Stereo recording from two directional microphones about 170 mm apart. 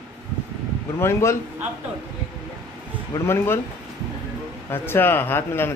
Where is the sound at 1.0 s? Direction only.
15° left (ahead or behind).